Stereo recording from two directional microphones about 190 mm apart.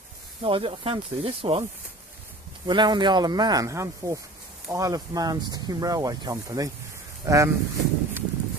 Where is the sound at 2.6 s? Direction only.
25° right (ahead or behind).